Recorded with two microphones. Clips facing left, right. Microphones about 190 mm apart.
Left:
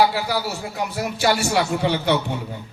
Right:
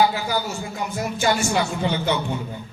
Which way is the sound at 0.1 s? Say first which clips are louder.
Left 1 dB; 70° left (ahead or behind).